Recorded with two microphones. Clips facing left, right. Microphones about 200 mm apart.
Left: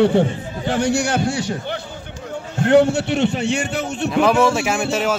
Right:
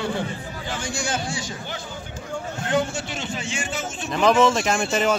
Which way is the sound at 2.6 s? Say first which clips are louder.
Left 11 dB; 65° left (ahead or behind).